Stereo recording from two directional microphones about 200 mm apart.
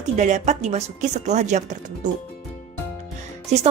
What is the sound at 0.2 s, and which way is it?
Speech, 35° right (ahead or behind).